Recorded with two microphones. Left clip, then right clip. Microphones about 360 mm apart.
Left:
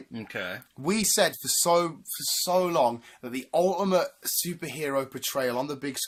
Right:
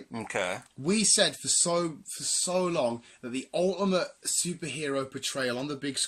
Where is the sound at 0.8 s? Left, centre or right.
Centre.